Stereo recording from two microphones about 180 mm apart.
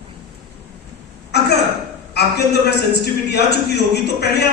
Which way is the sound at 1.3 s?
65° left (ahead or behind).